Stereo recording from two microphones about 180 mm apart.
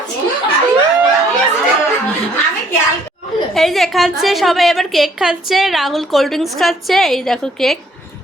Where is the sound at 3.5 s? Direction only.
Centre (ahead or behind).